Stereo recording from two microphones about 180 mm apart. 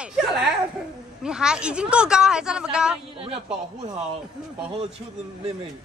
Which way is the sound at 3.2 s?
30° right (ahead or behind).